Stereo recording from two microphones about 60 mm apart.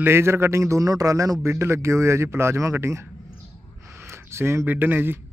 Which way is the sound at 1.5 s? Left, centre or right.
Right.